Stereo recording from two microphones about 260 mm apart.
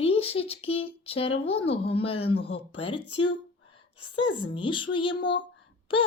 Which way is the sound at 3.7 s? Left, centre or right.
Centre.